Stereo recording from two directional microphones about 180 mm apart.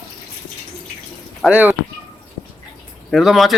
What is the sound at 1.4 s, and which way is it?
Speech, 10° right (ahead or behind).